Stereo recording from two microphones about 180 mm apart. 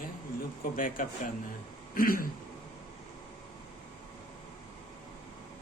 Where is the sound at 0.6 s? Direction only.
50° left (ahead or behind).